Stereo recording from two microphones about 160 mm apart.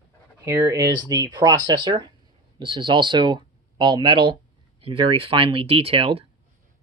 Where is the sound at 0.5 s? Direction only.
20° right (ahead or behind); by 6.2 s 35° right (ahead or behind).